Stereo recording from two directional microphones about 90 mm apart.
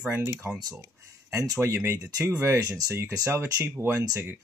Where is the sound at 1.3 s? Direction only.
40° right (ahead or behind).